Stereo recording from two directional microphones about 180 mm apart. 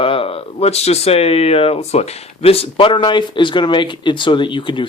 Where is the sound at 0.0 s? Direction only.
30° left (ahead or behind).